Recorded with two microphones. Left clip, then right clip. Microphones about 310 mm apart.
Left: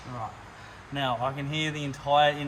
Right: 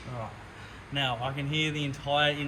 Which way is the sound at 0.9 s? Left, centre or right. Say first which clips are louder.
Left 2 dB; centre.